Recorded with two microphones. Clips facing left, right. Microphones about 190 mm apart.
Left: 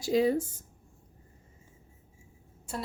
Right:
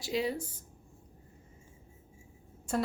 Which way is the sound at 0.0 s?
45° left (ahead or behind).